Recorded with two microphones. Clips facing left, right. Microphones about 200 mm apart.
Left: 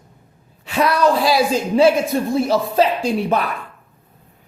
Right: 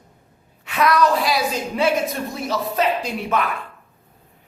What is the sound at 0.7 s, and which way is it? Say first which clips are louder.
A woman's voice: left 2 dB; 30° left (ahead or behind).